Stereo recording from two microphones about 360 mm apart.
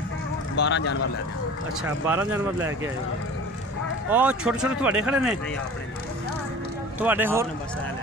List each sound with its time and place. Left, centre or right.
0.6 s speech: left
2.0 s speech: centre
4.1 s speech: centre
7.0 s speech: centre